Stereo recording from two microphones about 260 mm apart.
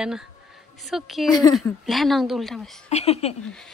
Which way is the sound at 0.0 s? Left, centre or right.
Centre.